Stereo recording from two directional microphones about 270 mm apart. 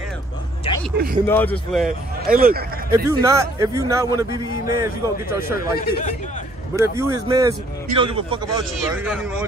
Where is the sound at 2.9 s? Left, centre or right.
Centre.